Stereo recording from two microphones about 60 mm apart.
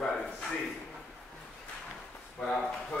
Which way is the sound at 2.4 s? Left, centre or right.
Centre.